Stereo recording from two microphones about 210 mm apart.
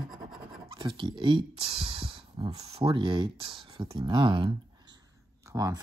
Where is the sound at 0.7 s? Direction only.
25° right (ahead or behind).